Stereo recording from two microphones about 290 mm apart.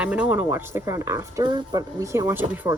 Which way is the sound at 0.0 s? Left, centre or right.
Centre.